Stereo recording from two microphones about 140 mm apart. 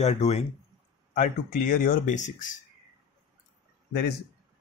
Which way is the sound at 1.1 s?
70° left (ahead or behind).